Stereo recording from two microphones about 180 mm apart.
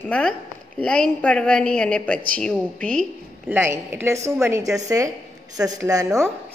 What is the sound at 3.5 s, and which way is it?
A woman's voice, 10° right (ahead or behind).